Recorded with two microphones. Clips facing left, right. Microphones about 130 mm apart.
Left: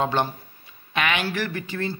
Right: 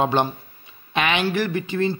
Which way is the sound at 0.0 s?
20° right (ahead or behind).